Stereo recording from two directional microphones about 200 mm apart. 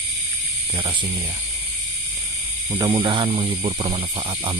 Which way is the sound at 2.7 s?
20° right (ahead or behind).